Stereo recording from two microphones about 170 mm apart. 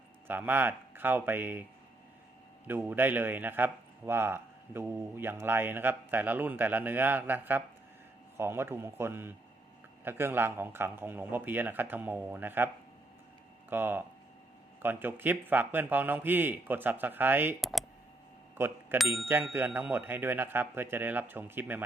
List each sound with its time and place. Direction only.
0.3 s a man's voice: 10° right (ahead or behind)
2.6 s a man's voice: 10° right (ahead or behind)
17.6 s a sound: centre (ahead or behind)
18.5 s bicycle bell: 15° right (ahead or behind)
19.2 s a man's voice: 10° right (ahead or behind)